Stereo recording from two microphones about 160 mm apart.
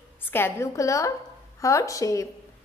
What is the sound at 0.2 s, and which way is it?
A woman's voice, 15° left (ahead or behind).